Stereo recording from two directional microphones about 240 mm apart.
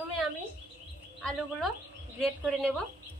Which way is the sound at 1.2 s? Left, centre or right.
Centre.